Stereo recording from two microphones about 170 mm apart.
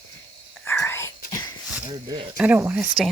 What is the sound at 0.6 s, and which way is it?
Whispering, 15° left (ahead or behind).